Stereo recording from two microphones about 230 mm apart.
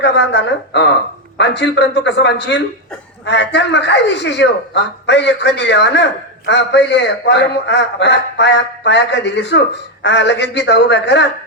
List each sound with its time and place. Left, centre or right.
0.0 s a man's voice: left